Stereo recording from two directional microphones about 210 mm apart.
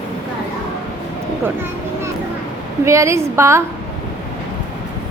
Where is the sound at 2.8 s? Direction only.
15° right (ahead or behind).